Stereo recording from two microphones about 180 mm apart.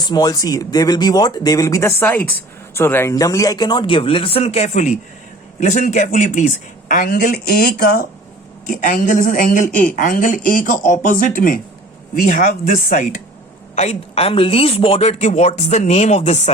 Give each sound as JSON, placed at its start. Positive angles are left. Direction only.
{"t": 0.1, "sound": "a woman's voice", "side_deg": 20}
{"t": 13.7, "sound": "speech", "side_deg": 35}